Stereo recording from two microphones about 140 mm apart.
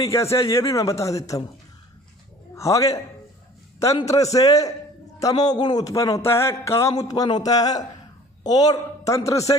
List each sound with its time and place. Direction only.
0.0 s a man's voice: 20° left (ahead or behind)
2.5 s a man's voice: 20° left (ahead or behind)
4.1 s a man's voice: 25° left (ahead or behind)